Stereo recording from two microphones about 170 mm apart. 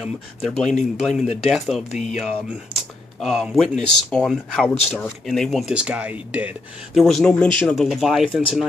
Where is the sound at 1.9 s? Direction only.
40° left (ahead or behind).